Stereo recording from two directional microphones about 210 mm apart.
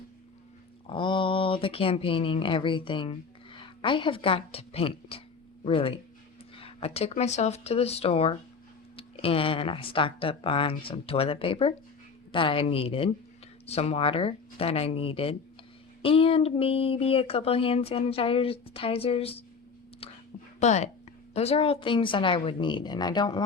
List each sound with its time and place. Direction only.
0.9 s speech: 25° left (ahead or behind)
20.0 s whispering: 25° left (ahead or behind)
20.6 s speech: 30° left (ahead or behind)